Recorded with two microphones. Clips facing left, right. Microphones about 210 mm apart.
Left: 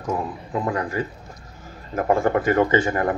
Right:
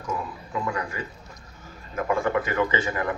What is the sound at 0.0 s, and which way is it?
Speech, 55° left (ahead or behind).